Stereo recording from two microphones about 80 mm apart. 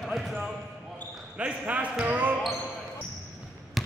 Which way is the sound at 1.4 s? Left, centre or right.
Centre.